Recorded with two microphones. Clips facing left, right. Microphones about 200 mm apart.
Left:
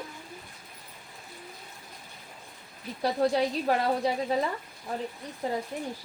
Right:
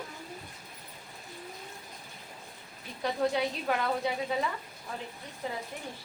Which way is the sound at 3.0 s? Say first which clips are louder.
Left 4 dB; 35° left (ahead or behind).